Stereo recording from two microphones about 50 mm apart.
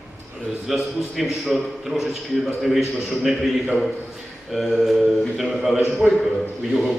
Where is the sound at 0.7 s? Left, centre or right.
Centre.